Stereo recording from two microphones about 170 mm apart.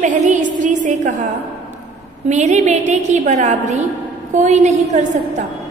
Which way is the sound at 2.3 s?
45° right (ahead or behind).